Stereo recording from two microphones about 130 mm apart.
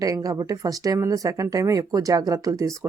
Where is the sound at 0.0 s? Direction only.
30° right (ahead or behind).